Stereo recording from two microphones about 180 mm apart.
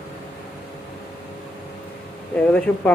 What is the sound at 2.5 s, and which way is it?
Speech, 5° left (ahead or behind).